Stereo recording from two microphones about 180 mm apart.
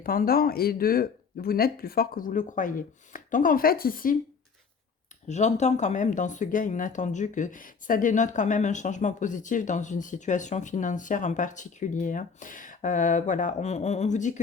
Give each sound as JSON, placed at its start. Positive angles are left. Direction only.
{"t": 0.0, "sound": "speech", "side_deg": 55}
{"t": 5.3, "sound": "speech", "side_deg": 40}